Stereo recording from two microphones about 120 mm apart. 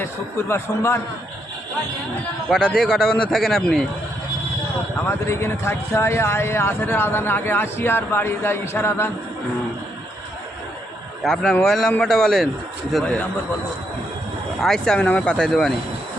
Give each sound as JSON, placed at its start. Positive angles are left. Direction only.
{"t": 0.0, "sound": "speech", "side_deg": 20}
{"t": 2.5, "sound": "a man's voice", "side_deg": 5}
{"t": 5.0, "sound": "speech", "side_deg": 20}
{"t": 11.2, "sound": "a man's voice", "side_deg": 5}
{"t": 14.6, "sound": "a man's voice", "side_deg": 5}